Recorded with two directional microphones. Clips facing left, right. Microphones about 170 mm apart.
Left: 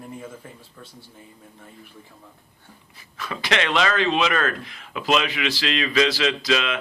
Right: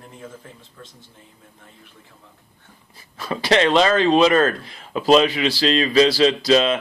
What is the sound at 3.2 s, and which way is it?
Speech, 35° right (ahead or behind).